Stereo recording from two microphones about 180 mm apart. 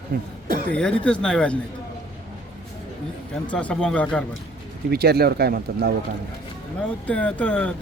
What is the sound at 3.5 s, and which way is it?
Speech, 5° left (ahead or behind).